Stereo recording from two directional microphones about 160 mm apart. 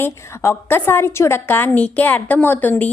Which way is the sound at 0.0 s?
15° left (ahead or behind).